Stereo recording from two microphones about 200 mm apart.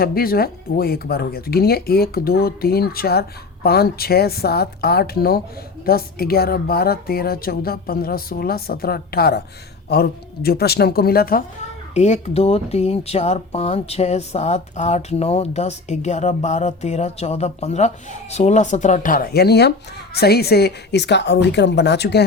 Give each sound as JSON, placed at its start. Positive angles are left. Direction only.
{"t": 0.0, "sound": "speech", "side_deg": 50}
{"t": 11.9, "sound": "a woman's voice", "side_deg": 35}